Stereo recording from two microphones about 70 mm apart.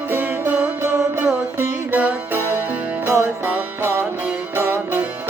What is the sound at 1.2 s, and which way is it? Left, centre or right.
Music, centre.